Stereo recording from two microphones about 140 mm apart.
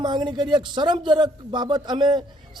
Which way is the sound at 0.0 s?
35° right (ahead or behind).